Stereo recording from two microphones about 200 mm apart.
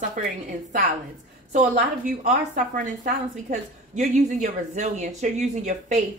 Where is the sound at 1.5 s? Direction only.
35° right (ahead or behind).